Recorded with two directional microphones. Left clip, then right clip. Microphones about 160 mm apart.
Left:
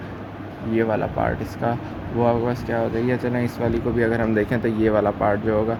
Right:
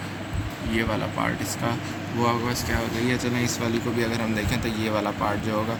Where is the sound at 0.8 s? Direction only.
40° left (ahead or behind).